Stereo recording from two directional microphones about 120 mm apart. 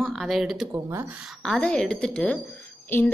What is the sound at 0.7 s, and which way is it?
Speech, 20° right (ahead or behind).